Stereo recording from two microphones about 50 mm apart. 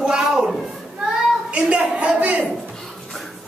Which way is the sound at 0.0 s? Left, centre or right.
Centre.